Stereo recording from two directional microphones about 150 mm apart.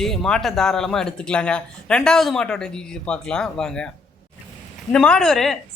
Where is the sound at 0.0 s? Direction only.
5° left (ahead or behind).